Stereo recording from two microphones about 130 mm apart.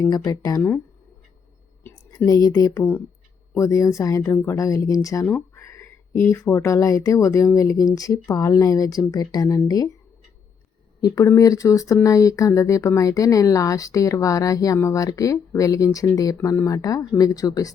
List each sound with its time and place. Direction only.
0.0 s speech: 30° left (ahead or behind)
2.1 s speech: 30° left (ahead or behind)
11.0 s speech: 25° left (ahead or behind)